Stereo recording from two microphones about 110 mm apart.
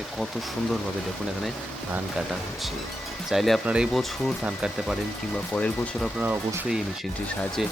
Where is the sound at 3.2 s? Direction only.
Centre (ahead or behind).